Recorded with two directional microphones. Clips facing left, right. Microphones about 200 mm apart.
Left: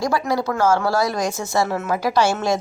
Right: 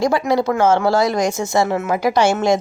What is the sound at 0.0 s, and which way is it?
A woman's voice, 25° right (ahead or behind).